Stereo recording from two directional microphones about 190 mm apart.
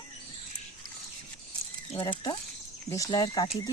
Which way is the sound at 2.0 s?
25° left (ahead or behind).